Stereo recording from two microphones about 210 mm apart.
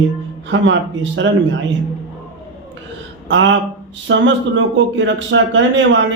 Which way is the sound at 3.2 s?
60° right (ahead or behind).